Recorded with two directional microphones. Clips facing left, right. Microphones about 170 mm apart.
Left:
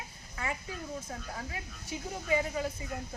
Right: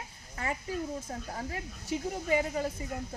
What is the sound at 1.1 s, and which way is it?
Speech, 35° right (ahead or behind).